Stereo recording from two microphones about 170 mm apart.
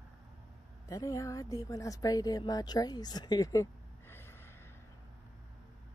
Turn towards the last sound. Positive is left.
turn(degrees=15)  # may be behind; listen again after turning